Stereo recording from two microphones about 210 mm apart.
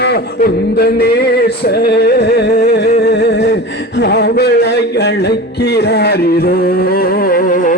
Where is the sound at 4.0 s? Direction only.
50° left (ahead or behind).